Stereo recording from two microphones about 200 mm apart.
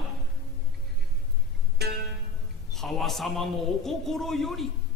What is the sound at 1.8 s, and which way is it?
Music, 55° right (ahead or behind).